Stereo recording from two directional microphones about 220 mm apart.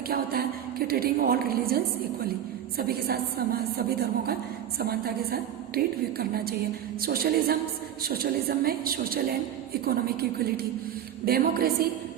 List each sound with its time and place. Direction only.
0.1 s a woman's voice: 45° right (ahead or behind)